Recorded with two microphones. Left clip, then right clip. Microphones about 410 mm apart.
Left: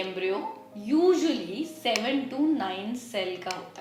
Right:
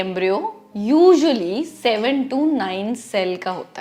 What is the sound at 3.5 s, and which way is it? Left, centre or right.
Speech, right.